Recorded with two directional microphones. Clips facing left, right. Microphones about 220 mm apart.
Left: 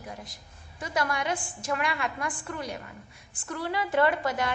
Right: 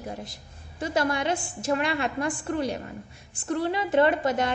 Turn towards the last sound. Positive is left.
turn(degrees=-25)  # may be behind; listen again after turning